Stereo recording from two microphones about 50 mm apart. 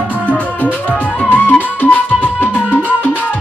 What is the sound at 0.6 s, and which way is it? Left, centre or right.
Music, left.